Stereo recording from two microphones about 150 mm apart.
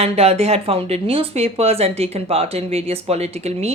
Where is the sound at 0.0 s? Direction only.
45° right (ahead or behind).